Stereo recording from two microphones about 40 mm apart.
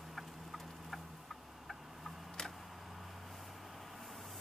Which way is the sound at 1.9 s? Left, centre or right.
Centre.